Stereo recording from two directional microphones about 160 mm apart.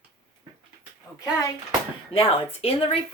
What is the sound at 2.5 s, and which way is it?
Speech, 35° left (ahead or behind).